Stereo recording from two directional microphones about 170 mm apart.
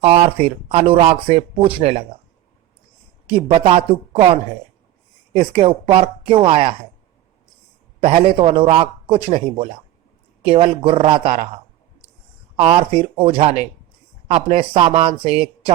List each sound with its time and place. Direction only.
0.0 s speech: 35° right (ahead or behind)
3.3 s speech: 35° right (ahead or behind)
8.0 s speech: 35° right (ahead or behind)
12.5 s speech: 35° right (ahead or behind)